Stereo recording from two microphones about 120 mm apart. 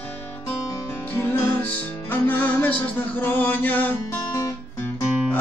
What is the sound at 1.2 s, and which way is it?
Music, 15° left (ahead or behind).